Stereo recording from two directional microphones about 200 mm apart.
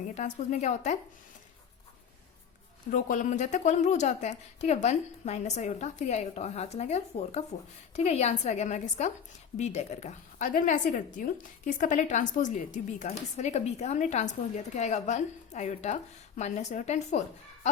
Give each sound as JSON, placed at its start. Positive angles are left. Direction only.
{"t": 0.1, "sound": "a woman's voice", "side_deg": 35}
{"t": 2.9, "sound": "a woman's voice", "side_deg": 40}